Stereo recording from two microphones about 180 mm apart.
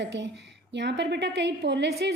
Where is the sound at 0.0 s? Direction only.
75° right (ahead or behind).